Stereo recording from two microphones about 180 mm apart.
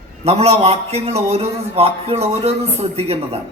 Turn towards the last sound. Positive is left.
turn(degrees=-35)  # may be behind; listen again after turning